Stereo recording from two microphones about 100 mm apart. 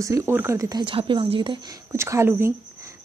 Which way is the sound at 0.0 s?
30° right (ahead or behind).